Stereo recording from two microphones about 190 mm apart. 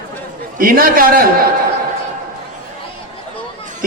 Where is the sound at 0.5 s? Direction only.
50° right (ahead or behind).